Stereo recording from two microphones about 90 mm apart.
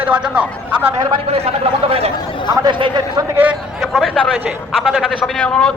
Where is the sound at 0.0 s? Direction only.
15° right (ahead or behind).